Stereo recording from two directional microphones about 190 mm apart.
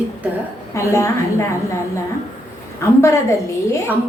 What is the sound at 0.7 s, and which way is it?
A woman's voice, 15° left (ahead or behind).